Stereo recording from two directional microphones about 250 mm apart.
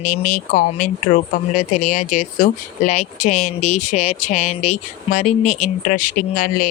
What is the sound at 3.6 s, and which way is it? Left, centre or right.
Speech, left.